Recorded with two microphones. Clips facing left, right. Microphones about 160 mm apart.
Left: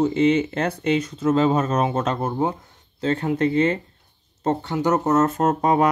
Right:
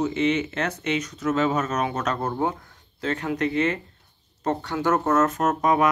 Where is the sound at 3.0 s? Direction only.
30° left (ahead or behind).